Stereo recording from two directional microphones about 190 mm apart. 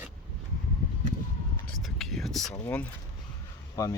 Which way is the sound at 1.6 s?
Centre (ahead or behind).